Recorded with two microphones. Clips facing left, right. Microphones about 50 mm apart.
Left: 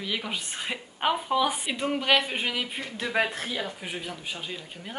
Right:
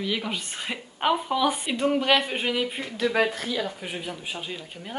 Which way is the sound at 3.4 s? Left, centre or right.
Centre.